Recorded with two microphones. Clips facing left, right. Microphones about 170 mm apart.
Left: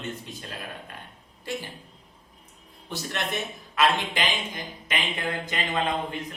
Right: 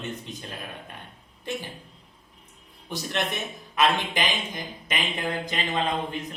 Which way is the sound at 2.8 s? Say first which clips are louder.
Right 2 dB; 15° right (ahead or behind).